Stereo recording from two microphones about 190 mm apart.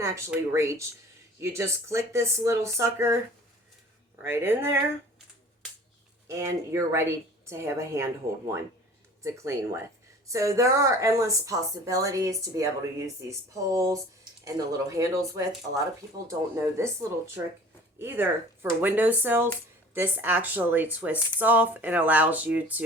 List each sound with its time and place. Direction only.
0.3 s speech: 15° right (ahead or behind)
4.2 s speech: 10° right (ahead or behind)
6.2 s speech: 15° right (ahead or behind)